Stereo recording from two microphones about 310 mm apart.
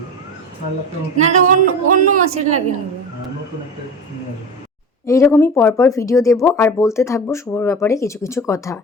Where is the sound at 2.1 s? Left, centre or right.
Right.